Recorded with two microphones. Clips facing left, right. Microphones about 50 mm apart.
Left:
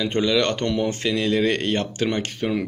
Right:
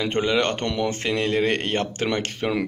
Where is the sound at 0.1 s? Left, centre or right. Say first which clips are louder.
Left 1 dB; right.